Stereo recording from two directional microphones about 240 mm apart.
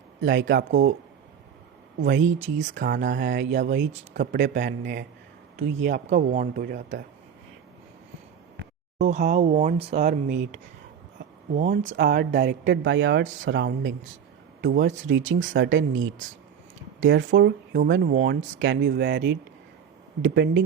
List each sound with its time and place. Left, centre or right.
0.2 s speech: right
2.0 s speech: right
4.5 s speech: right
5.5 s speech: right
6.1 s speech: right
9.0 s speech: right
11.6 s speech: right
11.9 s speech: right
15.1 s speech: right